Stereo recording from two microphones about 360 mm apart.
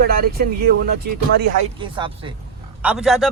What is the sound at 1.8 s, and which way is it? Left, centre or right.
Speech, centre.